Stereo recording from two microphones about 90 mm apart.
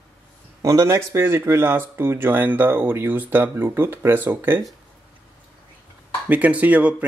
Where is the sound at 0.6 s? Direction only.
40° right (ahead or behind); by 4.6 s 25° right (ahead or behind).